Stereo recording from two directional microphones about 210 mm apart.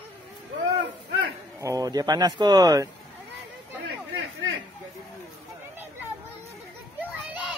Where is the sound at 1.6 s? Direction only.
15° right (ahead or behind).